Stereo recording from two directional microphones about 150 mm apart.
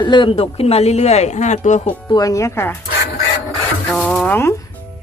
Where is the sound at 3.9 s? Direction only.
5° left (ahead or behind).